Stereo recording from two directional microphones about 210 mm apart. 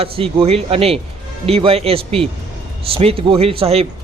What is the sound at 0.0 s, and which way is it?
A man's voice, 25° right (ahead or behind).